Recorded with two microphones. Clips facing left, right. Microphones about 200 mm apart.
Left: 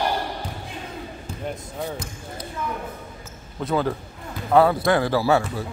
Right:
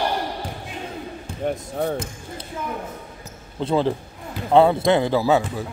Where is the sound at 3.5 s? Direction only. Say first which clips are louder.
Right 3 dB; 30° right (ahead or behind).